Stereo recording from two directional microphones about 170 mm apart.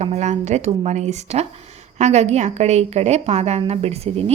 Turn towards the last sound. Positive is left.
turn(degrees=-35)  # may be behind; listen again after turning